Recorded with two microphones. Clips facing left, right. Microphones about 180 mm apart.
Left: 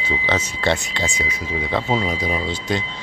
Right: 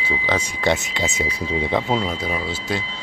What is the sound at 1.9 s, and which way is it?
Speech, 5° left (ahead or behind).